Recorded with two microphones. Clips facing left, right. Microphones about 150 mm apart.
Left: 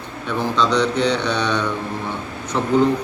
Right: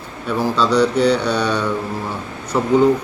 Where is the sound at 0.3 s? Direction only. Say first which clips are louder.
Right 2 dB; 10° right (ahead or behind).